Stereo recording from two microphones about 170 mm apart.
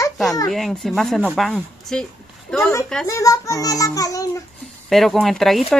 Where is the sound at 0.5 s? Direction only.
Centre (ahead or behind).